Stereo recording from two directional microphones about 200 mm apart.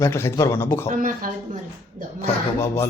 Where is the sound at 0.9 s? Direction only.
40° right (ahead or behind).